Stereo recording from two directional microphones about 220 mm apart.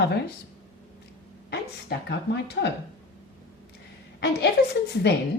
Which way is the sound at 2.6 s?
45° left (ahead or behind).